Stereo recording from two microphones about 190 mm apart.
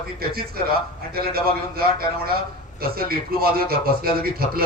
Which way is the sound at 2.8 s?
50° right (ahead or behind).